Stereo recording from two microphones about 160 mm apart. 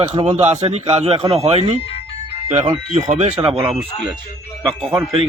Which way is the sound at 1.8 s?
35° left (ahead or behind).